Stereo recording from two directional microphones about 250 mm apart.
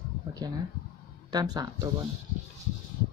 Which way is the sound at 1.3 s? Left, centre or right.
Centre.